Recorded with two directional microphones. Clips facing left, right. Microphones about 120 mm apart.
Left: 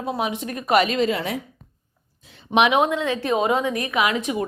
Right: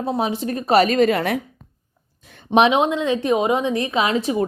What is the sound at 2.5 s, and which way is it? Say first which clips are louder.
A woman's voice: right 2 dB; 30° right (ahead or behind).